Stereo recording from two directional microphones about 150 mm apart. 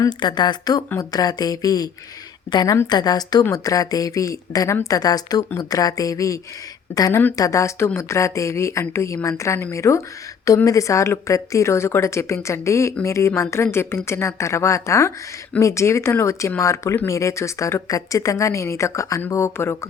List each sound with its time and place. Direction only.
0.2 s a woman's voice: 30° left (ahead or behind)